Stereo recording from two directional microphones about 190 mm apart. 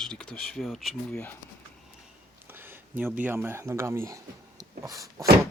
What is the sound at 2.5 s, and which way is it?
Speech, 10° right (ahead or behind).